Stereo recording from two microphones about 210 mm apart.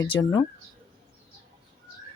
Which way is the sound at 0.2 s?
15° left (ahead or behind).